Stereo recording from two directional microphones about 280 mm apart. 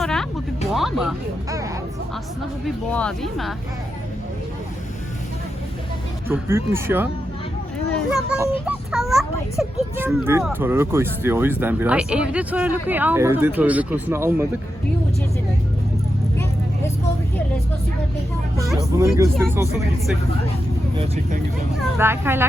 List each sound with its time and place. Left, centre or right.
0.0 s music: centre
0.7 s a child's voice: centre
2.6 s a child's voice: centre
6.2 s a child's voice: centre
18.9 s speech: centre
20.9 s speech: right
21.9 s speech: centre